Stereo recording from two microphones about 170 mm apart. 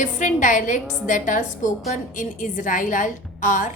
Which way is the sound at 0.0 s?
45° left (ahead or behind).